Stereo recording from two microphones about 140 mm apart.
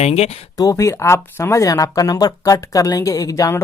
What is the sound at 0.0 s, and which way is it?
Speech, 50° left (ahead or behind).